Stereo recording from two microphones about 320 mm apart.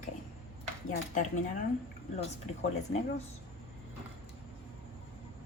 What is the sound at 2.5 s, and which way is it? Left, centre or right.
Speech, centre.